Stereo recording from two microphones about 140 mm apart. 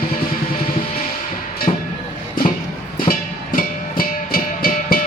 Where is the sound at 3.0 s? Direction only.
85° left.